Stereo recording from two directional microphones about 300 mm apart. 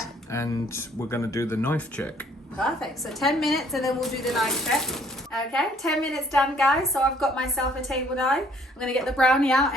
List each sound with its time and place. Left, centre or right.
0.3 s speech: centre